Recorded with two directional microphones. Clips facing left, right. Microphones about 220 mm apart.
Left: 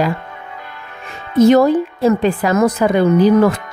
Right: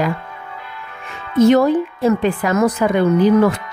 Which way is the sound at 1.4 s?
40° left (ahead or behind).